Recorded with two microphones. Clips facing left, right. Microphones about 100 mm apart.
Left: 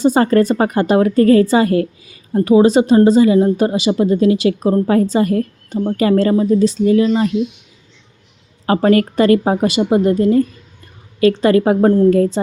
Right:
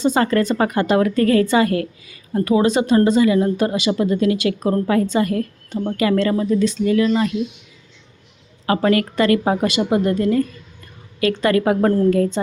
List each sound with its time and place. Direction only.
0.1 s a woman's voice: 35° left (ahead or behind)
8.6 s a woman's voice: 30° left (ahead or behind)